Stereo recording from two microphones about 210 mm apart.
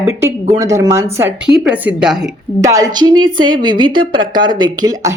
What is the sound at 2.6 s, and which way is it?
A woman's voice, 15° right (ahead or behind).